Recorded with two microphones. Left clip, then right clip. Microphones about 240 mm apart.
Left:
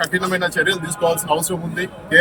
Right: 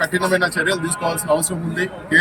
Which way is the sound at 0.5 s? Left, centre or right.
Centre.